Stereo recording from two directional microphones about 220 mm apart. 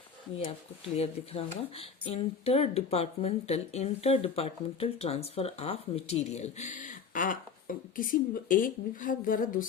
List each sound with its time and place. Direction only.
0.9 s speech: 25° left (ahead or behind)